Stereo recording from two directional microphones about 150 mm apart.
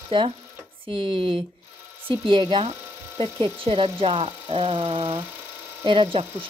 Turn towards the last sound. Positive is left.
turn(degrees=-35)  # may be behind; listen again after turning